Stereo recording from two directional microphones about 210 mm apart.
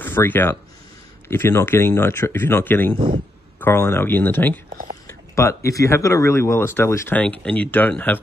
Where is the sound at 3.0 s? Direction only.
25° right (ahead or behind).